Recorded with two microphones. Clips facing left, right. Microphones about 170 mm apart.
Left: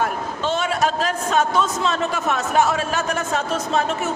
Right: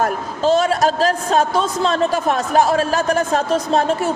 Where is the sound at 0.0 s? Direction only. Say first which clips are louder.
Right 5 dB; 40° right (ahead or behind).